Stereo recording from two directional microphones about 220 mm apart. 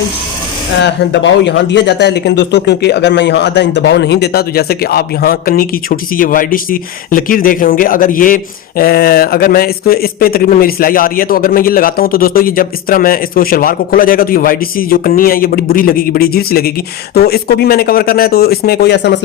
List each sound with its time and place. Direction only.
0.8 s speech: 55° left (ahead or behind)